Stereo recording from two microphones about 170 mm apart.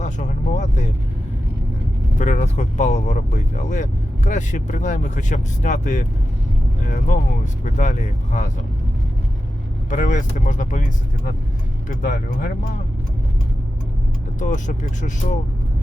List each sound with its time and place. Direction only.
0.0 s vehicle: 45° left (ahead or behind)
2.1 s speech: 45° left (ahead or behind)
9.9 s speech: 45° left (ahead or behind)
14.3 s speech: 45° left (ahead or behind)